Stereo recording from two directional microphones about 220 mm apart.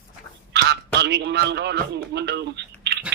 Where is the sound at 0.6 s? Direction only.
50° right (ahead or behind).